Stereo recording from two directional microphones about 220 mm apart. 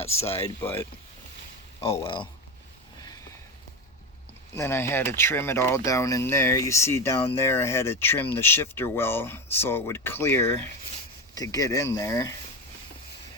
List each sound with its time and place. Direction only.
0.0 s speech: 30° left (ahead or behind)
1.8 s speech: 25° left (ahead or behind)
3.0 s a sound: 15° left (ahead or behind)
4.5 s speech: 10° left (ahead or behind)